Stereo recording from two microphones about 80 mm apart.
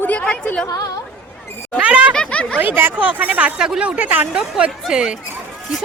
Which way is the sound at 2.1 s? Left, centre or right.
Centre.